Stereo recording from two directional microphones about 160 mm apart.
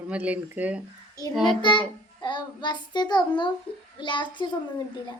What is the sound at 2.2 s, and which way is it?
Child singing, 30° left (ahead or behind).